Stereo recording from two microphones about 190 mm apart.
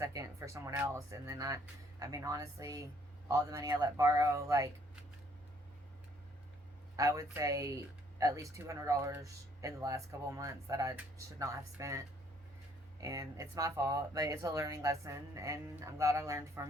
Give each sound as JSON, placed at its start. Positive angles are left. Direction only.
{"t": 0.0, "sound": "speech", "side_deg": -15}
{"t": 6.9, "sound": "speech", "side_deg": -15}